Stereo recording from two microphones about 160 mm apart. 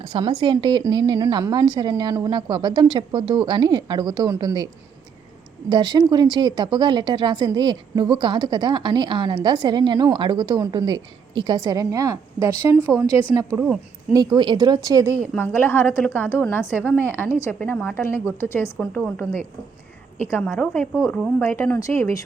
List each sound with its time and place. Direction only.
0.0 s speech: 30° right (ahead or behind)
13.3 s speech: 5° right (ahead or behind)
14.1 s speech: 25° right (ahead or behind)
15.3 s a woman's voice: 15° left (ahead or behind)